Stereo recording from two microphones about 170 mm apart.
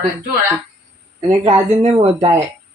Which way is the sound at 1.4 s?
30° right (ahead or behind).